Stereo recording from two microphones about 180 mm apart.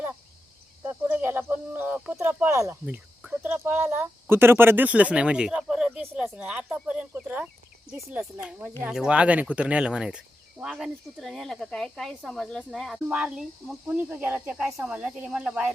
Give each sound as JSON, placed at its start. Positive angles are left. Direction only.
{"t": 0.9, "sound": "speech", "side_deg": -10}